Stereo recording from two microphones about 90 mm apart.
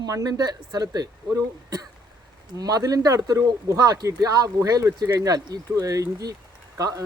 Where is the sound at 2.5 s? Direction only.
45° right (ahead or behind).